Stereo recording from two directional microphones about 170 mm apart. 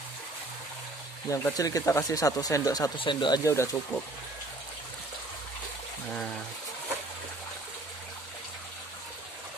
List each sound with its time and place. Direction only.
1.3 s speech: 20° left (ahead or behind)